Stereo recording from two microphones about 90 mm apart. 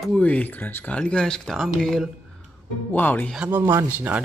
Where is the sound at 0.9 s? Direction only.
10° left (ahead or behind).